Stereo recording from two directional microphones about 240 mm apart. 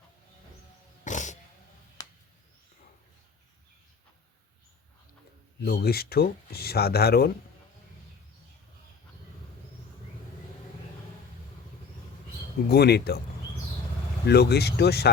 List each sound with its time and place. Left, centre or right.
1.0 s pig: left
2.0 s a sound: centre
5.6 s speech: left
12.6 s speech: left
14.3 s speech: left